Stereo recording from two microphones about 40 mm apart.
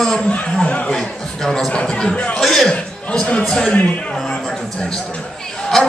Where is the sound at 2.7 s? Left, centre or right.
Left.